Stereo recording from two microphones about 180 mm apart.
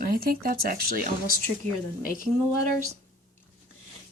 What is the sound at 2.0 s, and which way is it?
Speech, 50° left (ahead or behind).